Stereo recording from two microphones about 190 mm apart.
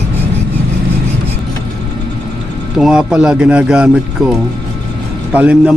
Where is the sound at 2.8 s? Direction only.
5° right (ahead or behind).